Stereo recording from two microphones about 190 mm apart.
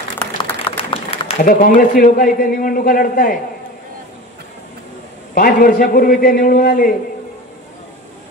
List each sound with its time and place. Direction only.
0.4 s a sound: 25° left (ahead or behind)
1.4 s a man's voice: 45° left (ahead or behind)
5.3 s a man's voice: 50° left (ahead or behind)